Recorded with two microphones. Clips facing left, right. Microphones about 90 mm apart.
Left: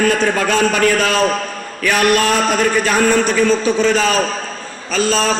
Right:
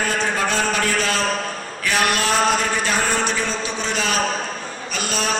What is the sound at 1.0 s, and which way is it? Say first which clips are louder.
A man's voice: left 6 dB; 45° left (ahead or behind).